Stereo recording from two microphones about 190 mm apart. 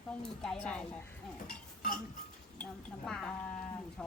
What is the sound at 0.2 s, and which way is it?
Speech, 5° left (ahead or behind).